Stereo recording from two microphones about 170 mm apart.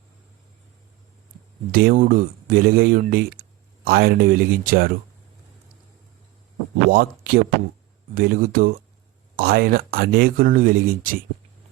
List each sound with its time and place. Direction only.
1.7 s speech: 55° right (ahead or behind)
6.9 s speech: 65° right (ahead or behind)